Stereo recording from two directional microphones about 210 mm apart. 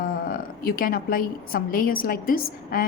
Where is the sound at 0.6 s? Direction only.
45° left (ahead or behind).